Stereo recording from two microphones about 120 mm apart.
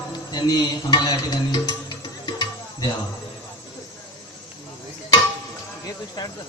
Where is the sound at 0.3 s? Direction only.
35° left (ahead or behind).